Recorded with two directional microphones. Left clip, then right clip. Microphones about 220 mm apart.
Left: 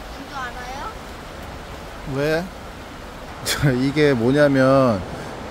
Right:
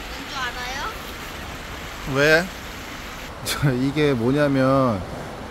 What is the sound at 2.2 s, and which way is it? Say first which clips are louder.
Speech: right 5 dB; centre (ahead or behind).